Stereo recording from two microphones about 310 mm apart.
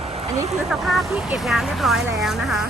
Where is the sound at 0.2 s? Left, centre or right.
Centre.